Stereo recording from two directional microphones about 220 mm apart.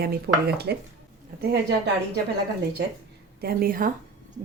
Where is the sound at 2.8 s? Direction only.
50° right (ahead or behind).